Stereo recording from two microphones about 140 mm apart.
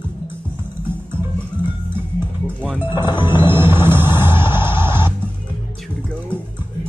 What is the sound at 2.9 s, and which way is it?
Music, 15° right (ahead or behind).